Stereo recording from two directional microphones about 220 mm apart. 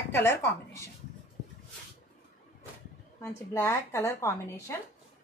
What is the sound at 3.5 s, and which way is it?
A woman's voice, 10° left (ahead or behind).